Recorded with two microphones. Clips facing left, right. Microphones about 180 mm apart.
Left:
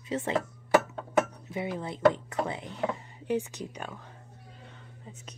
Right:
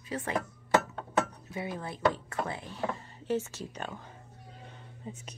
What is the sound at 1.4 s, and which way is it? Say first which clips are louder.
Speech: left 3 dB; 20° left (ahead or behind).